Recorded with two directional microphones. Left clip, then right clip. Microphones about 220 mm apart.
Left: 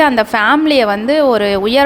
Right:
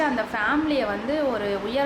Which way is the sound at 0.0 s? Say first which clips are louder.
Left 13 dB; 50° left (ahead or behind).